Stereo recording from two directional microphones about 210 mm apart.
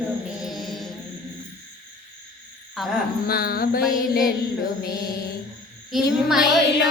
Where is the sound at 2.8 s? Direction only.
Centre (ahead or behind).